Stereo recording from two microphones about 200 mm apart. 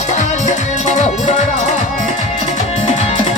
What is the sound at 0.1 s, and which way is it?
Music, 35° left (ahead or behind).